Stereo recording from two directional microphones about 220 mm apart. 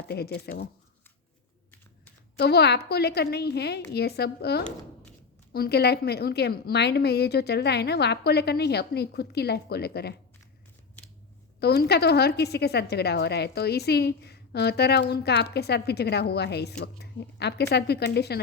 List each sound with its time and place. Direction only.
0.1 s speech: 45° left (ahead or behind)
2.4 s speech: 45° left (ahead or behind)
11.6 s speech: 45° left (ahead or behind)